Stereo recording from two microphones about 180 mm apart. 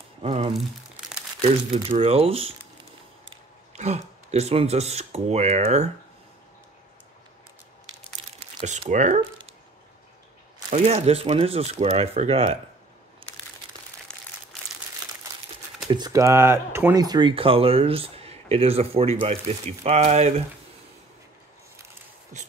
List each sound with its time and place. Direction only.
0.2 s speech: 35° right (ahead or behind)
3.7 s speech: 35° right (ahead or behind)
8.2 s crumpling: 30° right (ahead or behind)
8.6 s speech: 40° right (ahead or behind)
10.7 s speech: 35° right (ahead or behind)
14.1 s crumpling: 5° left (ahead or behind)
15.9 s speech: 20° right (ahead or behind); by 20.4 s 35° right (ahead or behind)